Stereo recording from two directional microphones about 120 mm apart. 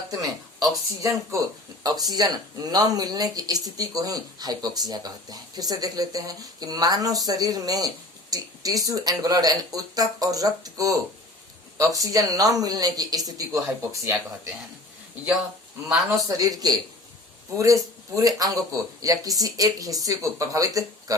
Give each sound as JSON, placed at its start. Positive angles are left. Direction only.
{"t": 1.3, "sound": "speech", "side_deg": -25}
{"t": 15.9, "sound": "a man's voice", "side_deg": 0}
{"t": 16.4, "sound": "speech", "side_deg": -30}